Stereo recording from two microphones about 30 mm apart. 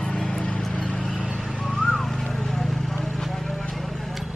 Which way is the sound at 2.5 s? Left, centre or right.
Centre.